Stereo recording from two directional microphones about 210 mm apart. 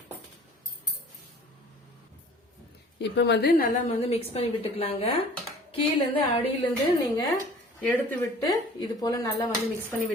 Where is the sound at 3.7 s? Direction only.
30° left (ahead or behind).